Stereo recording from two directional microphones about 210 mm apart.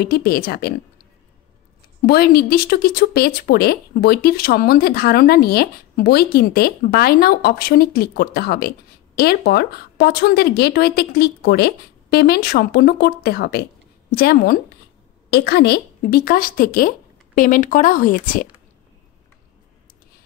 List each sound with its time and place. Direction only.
0.0 s speech: 45° left (ahead or behind)
2.0 s speech: 45° left (ahead or behind)